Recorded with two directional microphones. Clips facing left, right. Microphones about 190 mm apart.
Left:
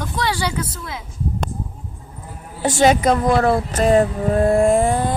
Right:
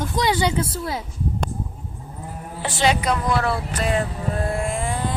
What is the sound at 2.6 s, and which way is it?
Speech, 45° left (ahead or behind).